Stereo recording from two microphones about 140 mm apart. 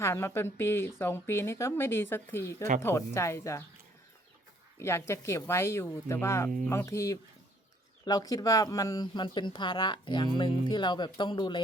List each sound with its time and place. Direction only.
0.0 s speech: 20° left (ahead or behind)
4.8 s speech: 20° left (ahead or behind)